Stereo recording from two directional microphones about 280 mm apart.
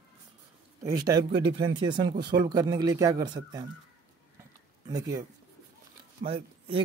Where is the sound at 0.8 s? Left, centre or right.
Centre.